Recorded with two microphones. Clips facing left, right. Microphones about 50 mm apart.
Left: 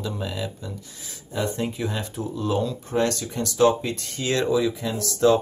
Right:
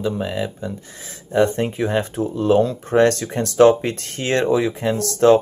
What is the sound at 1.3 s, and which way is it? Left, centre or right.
Speech, right.